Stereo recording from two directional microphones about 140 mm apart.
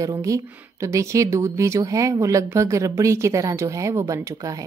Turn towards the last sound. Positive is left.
turn(degrees=-25)  # may be behind; listen again after turning